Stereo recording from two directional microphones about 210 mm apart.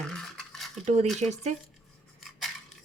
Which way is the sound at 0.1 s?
Centre (ahead or behind).